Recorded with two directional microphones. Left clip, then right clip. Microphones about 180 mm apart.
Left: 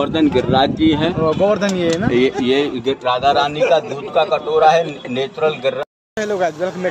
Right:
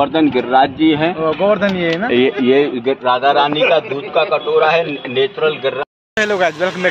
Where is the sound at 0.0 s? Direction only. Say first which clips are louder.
Right 2 dB; 40° right (ahead or behind).